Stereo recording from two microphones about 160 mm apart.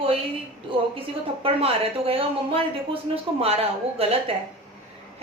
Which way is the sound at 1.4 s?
35° right (ahead or behind).